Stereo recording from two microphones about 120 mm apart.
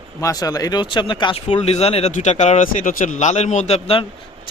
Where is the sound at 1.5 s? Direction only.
65° left (ahead or behind).